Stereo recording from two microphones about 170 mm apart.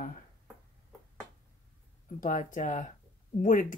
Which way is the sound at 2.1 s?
50° left (ahead or behind).